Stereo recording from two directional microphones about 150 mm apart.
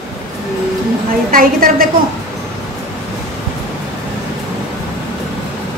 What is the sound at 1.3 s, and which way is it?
Speech, 70° right (ahead or behind).